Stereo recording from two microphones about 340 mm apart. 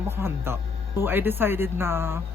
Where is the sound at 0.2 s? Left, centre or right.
Centre.